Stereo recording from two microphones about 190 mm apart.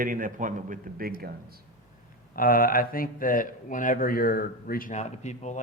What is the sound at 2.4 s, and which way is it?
Speech, 50° left (ahead or behind).